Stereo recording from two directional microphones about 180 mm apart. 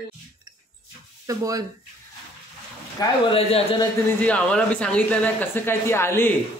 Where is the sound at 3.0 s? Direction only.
35° left (ahead or behind).